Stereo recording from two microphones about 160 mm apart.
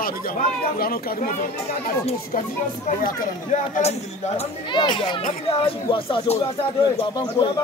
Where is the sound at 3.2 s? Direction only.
45° left (ahead or behind).